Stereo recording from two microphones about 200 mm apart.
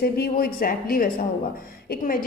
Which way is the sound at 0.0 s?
50° left (ahead or behind).